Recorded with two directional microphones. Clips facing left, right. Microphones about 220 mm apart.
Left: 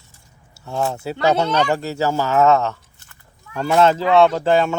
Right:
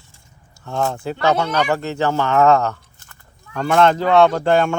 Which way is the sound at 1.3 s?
25° left (ahead or behind).